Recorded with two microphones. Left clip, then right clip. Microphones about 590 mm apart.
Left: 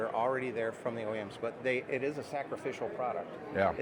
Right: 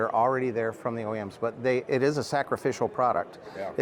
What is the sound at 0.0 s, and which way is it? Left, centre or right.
Speech, right.